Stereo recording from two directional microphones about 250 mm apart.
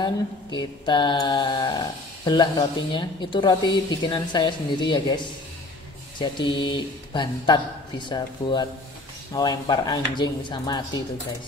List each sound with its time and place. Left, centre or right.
0.0 s a woman's voice: centre